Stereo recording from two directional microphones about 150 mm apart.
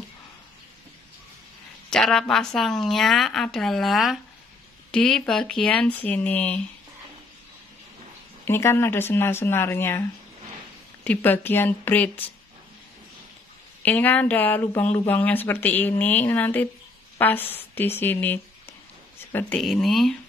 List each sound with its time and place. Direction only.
1.9 s a woman's voice: 5° left (ahead or behind)
8.5 s speech: 15° left (ahead or behind)
11.1 s speech: 10° left (ahead or behind)
13.8 s speech: 10° left (ahead or behind)
19.1 s a sound: 15° left (ahead or behind)
19.6 s a woman's voice: centre (ahead or behind)